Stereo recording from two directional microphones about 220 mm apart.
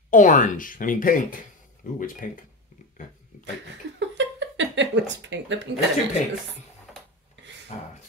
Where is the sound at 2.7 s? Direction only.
35° left (ahead or behind).